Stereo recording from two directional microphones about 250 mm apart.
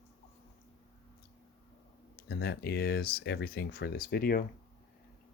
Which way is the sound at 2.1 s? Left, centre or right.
Left.